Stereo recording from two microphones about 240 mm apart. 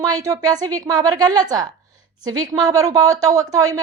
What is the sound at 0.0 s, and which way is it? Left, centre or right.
Speech, centre.